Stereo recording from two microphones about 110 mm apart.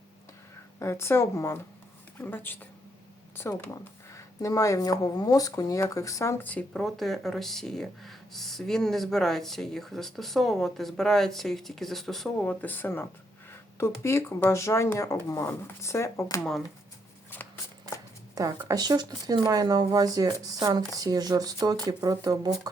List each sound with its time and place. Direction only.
0.8 s speech: 25° left (ahead or behind)
4.1 s speech: 30° left (ahead or behind)
6.4 s speech: 15° left (ahead or behind)
16.4 s speech: centre (ahead or behind)
18.7 s speech: 40° right (ahead or behind)